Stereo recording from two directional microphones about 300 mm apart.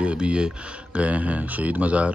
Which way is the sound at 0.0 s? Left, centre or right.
Centre.